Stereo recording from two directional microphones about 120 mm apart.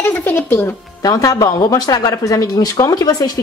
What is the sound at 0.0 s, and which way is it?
Music, 20° left (ahead or behind).